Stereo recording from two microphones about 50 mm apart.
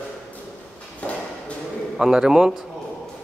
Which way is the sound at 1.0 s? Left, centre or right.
Left.